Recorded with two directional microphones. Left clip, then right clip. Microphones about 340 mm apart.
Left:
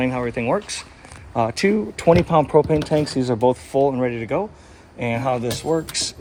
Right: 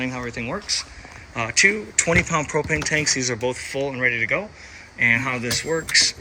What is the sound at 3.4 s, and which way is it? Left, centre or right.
Speech, centre.